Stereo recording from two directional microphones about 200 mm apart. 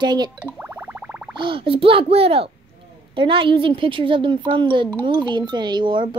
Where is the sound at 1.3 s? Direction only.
25° right (ahead or behind).